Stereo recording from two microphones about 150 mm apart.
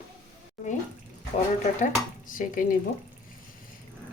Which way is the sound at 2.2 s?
65° left (ahead or behind).